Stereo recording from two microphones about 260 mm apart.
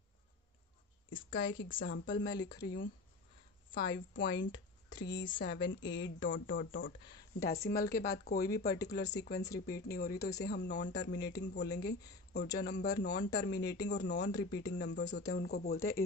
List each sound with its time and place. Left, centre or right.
1.1 s speech: left
7.4 s speech: left